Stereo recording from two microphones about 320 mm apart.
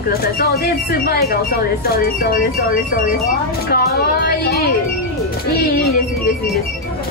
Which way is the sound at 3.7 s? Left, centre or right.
Left.